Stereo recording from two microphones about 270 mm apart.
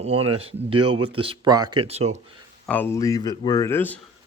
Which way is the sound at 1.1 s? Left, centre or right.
Centre.